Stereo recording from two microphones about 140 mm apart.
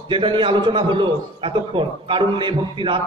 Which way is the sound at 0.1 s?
35° right (ahead or behind).